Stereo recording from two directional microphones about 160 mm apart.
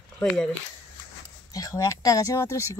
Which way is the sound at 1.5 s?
20° left (ahead or behind).